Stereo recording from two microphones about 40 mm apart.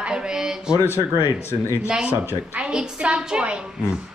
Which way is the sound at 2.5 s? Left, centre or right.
Right.